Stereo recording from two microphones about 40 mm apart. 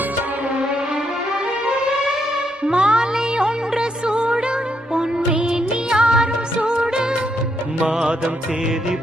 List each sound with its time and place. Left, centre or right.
1.7 s music: centre